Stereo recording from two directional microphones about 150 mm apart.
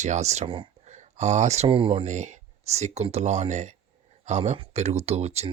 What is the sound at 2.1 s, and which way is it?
Speech, 50° right (ahead or behind).